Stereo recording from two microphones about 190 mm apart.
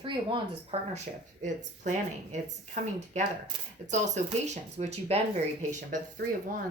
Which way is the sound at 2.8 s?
40° right (ahead or behind).